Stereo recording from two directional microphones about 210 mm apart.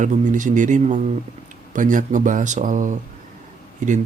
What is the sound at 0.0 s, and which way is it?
Speech, 35° right (ahead or behind).